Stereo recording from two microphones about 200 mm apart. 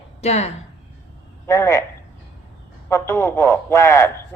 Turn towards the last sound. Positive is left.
turn(degrees=15)  # may be behind; listen again after turning